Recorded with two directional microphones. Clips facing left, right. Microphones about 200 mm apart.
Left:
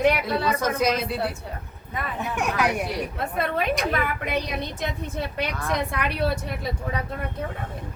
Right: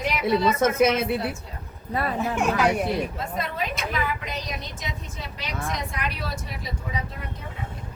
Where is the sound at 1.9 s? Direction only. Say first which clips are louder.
Right 5 dB; 35° right (ahead or behind).